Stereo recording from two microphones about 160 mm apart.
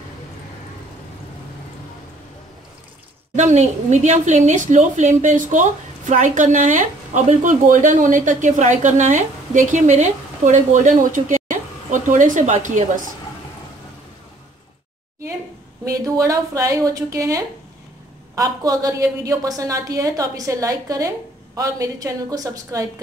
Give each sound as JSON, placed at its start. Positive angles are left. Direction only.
{"t": 3.3, "sound": "a woman's voice", "side_deg": -45}
{"t": 15.8, "sound": "a woman's voice", "side_deg": -20}